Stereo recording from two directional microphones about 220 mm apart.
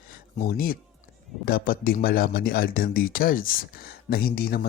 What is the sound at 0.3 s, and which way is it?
A man's voice, 40° left (ahead or behind).